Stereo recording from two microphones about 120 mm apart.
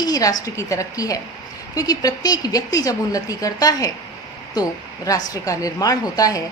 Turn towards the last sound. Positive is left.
turn(degrees=30)  # may be behind; listen again after turning